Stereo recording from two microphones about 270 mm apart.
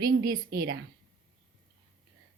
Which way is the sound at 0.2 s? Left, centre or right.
Right.